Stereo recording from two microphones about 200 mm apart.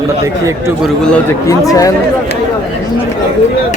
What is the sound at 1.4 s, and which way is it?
Speech, 15° left (ahead or behind).